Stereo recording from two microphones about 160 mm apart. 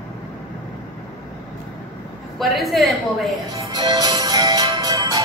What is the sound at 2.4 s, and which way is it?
Speech, centre (ahead or behind).